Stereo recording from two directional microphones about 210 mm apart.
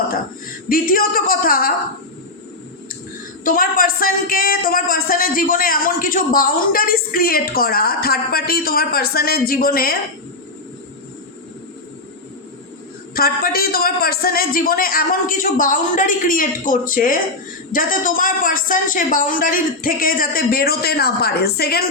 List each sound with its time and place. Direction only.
0.7 s speech: 45° left (ahead or behind)
3.4 s speech: 45° left (ahead or behind)
13.1 s a man's voice: 45° left (ahead or behind)